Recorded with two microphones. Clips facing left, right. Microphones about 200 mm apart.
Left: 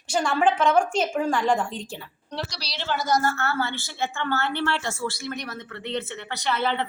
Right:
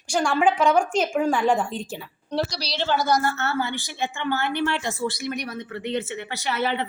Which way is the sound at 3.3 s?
20° right (ahead or behind).